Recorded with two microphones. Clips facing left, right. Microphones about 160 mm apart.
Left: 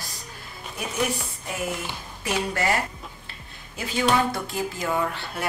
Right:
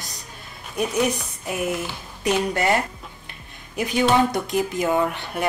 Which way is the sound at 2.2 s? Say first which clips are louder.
Right 4 dB; 20° right (ahead or behind).